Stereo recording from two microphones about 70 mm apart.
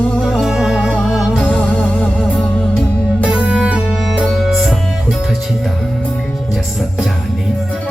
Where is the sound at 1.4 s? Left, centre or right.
Centre.